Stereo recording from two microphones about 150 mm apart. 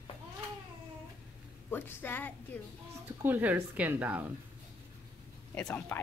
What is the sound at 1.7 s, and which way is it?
Speech, 15° left (ahead or behind).